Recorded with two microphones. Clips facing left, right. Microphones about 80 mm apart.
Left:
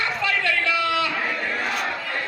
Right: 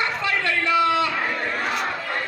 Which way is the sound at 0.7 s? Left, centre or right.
Right.